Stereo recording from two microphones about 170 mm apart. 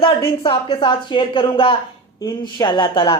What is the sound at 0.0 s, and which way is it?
A woman's voice, 30° left (ahead or behind).